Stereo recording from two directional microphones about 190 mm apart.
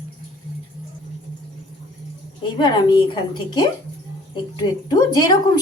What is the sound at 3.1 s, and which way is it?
A woman's voice, 20° left (ahead or behind).